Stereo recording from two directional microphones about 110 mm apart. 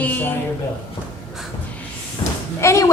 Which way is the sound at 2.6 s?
25° left (ahead or behind).